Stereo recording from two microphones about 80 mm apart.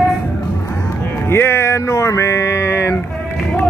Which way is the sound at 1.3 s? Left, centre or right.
Left.